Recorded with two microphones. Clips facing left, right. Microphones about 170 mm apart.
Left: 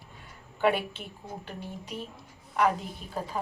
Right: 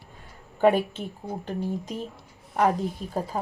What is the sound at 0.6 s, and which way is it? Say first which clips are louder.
Speech: right 6 dB; 40° right (ahead or behind).